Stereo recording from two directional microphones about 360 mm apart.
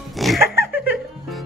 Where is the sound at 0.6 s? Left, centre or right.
Left.